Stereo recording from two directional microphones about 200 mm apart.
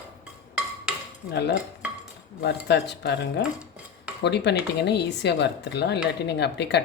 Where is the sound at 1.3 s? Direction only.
60° left (ahead or behind).